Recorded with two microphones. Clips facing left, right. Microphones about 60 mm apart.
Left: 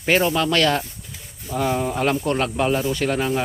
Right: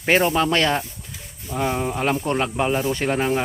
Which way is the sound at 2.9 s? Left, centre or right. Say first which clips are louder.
Even; right.